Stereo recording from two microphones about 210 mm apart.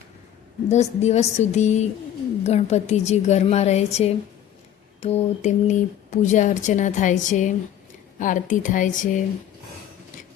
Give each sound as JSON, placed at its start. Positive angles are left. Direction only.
{"t": 0.7, "sound": "speech", "side_deg": 30}